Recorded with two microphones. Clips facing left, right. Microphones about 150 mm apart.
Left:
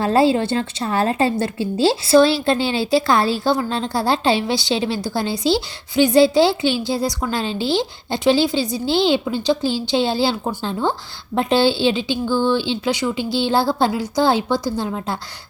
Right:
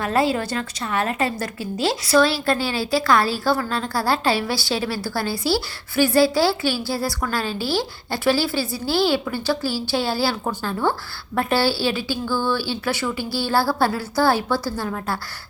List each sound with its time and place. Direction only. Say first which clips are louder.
0.0 s a woman's voice: left 5 dB; 30° left (ahead or behind)